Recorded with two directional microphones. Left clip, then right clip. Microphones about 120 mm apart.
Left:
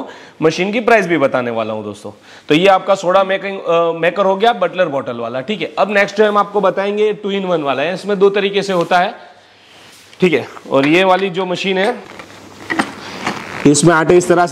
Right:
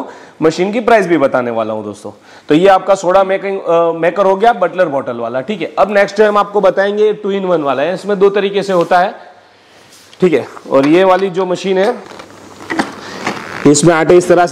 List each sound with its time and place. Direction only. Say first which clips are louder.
0.0 s a man's voice: right 2 dB; 40° left (ahead or behind)
10.2 s a man's voice: right 2 dB; 40° left (ahead or behind)
12.6 s vehicle: right 1 dB; 15° left (ahead or behind)
13.2 s a sound: right 2 dB; 15° left (ahead or behind)
13.7 s a man's voice: right 2 dB; 35° left (ahead or behind)